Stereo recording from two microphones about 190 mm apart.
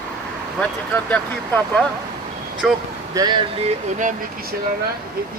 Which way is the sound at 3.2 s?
20° right (ahead or behind).